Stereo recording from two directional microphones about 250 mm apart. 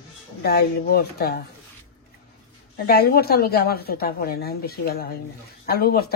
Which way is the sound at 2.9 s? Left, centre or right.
Left.